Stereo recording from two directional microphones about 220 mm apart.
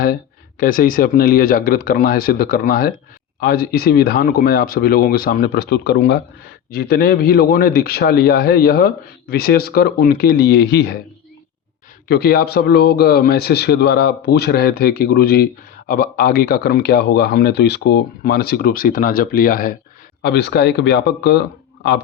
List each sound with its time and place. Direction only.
0.6 s a man's voice: 40° left (ahead or behind)
12.0 s a man's voice: 45° left (ahead or behind)